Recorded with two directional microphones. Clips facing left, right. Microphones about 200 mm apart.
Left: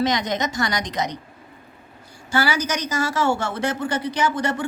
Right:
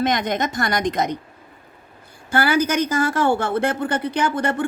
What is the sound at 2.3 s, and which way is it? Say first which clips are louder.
A woman's voice: right 4 dB; 55° right (ahead or behind).